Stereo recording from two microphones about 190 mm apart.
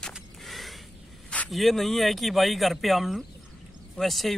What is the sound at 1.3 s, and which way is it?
Speech, 5° left (ahead or behind).